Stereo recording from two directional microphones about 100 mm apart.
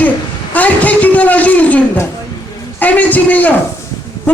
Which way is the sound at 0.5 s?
15° left (ahead or behind).